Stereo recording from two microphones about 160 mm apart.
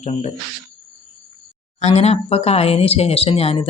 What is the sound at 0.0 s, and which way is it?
Speech, 40° left (ahead or behind).